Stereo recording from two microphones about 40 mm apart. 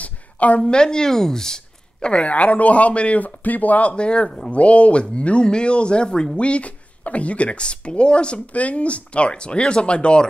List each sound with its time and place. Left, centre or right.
0.0 s a sound: left
0.7 s speech: centre; by 3.9 s left
3.9 s speech: left